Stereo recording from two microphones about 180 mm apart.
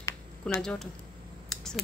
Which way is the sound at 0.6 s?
5° left (ahead or behind).